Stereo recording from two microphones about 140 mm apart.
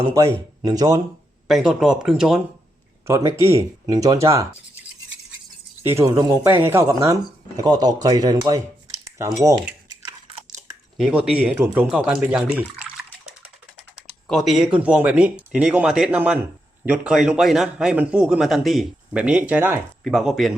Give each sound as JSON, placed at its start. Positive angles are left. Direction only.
{"t": 0.1, "sound": "speech", "side_deg": -25}
{"t": 1.5, "sound": "a man's voice", "side_deg": -5}
{"t": 3.1, "sound": "speech", "side_deg": -20}
{"t": 5.8, "sound": "speech", "side_deg": -20}
{"t": 11.3, "sound": "speech", "side_deg": -10}
{"t": 13.7, "sound": "a man's voice", "side_deg": 5}
{"t": 20.1, "sound": "a man's voice", "side_deg": 0}